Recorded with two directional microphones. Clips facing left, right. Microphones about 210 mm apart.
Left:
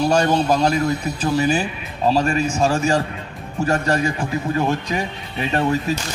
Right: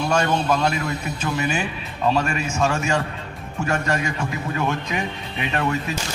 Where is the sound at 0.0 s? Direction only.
35° left (ahead or behind).